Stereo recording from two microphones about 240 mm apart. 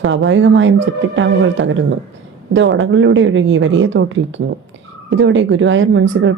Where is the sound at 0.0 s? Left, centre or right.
Right.